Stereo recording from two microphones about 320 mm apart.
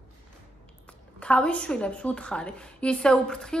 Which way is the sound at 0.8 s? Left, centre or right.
Centre.